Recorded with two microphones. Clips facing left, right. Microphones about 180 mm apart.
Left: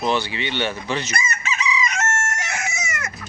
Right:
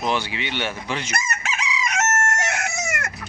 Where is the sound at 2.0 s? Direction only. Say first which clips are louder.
Right 3 dB; 65° right (ahead or behind).